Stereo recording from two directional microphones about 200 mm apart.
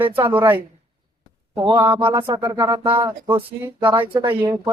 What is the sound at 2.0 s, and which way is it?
Speech, 25° right (ahead or behind).